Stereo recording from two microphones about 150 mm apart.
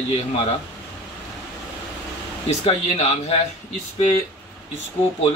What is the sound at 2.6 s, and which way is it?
Speech, 45° left (ahead or behind).